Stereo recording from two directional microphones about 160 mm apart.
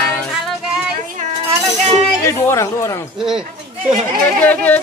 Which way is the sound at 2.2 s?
15° left (ahead or behind).